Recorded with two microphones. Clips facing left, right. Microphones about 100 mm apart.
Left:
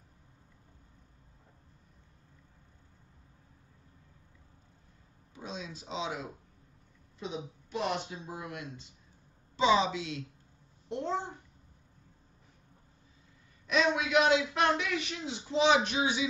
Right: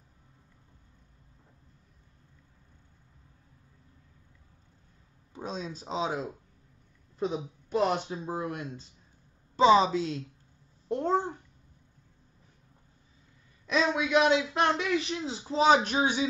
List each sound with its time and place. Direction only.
5.3 s a man's voice: 40° right (ahead or behind)
13.7 s a man's voice: 30° right (ahead or behind)